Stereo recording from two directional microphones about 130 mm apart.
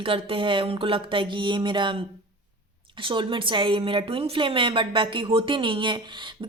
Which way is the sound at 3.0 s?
40° right (ahead or behind).